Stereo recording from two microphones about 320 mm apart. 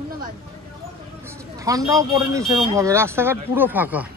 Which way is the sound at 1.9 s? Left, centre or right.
Centre.